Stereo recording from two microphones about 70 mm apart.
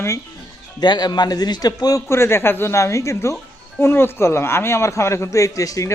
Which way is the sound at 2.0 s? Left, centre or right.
Left.